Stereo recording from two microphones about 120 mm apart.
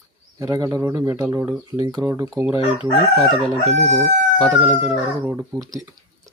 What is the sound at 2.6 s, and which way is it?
Chicken, 50° left (ahead or behind).